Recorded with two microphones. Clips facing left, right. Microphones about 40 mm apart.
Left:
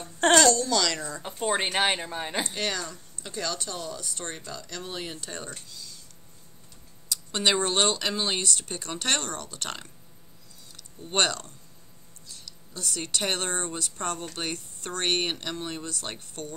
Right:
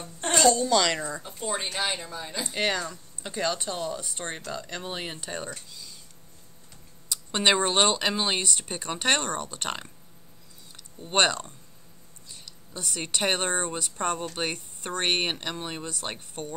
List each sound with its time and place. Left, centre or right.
0.4 s speech: centre
1.4 s speech: left
2.5 s speech: centre
5.7 s a sound: centre
7.1 s speech: centre
11.0 s speech: centre